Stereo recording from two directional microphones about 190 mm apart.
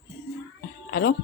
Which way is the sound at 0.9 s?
55° left (ahead or behind).